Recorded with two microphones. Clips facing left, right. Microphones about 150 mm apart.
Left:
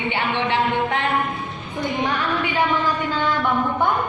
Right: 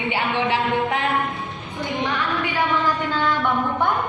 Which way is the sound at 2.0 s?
45° left (ahead or behind).